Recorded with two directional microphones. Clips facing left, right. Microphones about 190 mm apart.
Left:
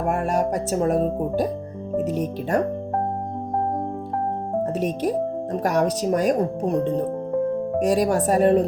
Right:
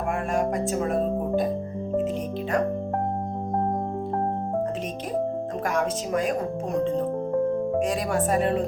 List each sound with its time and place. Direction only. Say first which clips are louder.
0.1 s speech: left 2 dB; 40° left (ahead or behind)
5.6 s speech: left 6 dB; 40° left (ahead or behind)